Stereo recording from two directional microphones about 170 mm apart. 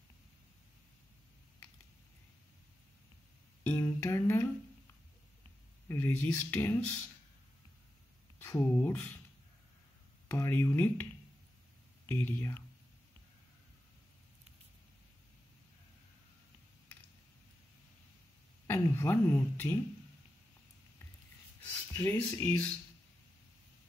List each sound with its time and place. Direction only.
3.6 s a sound: 15° left (ahead or behind)
5.9 s speech: 15° left (ahead or behind)
8.4 s speech: 15° left (ahead or behind)
10.3 s speech: 15° left (ahead or behind)
12.1 s speech: 15° left (ahead or behind)
18.7 s speech: 15° left (ahead or behind)
21.9 s speech: 10° left (ahead or behind)